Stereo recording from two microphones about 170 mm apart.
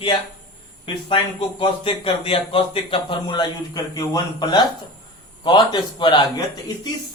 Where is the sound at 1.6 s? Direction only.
30° left (ahead or behind).